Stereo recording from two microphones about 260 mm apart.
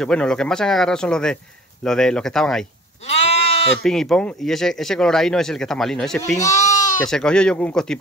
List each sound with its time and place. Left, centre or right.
0.0 s speech: centre
3.1 s goat: left
3.8 s speech: centre
6.5 s bleat: left
7.1 s speech: centre